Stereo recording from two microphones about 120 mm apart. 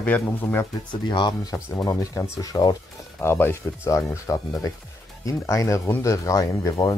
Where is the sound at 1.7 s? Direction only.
30° left (ahead or behind).